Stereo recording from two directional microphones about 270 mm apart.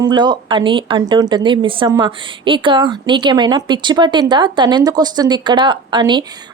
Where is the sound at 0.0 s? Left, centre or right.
Centre.